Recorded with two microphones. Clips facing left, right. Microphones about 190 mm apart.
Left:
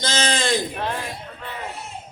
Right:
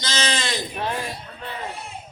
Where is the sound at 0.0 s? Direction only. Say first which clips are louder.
Left 3 dB; 50° left (ahead or behind).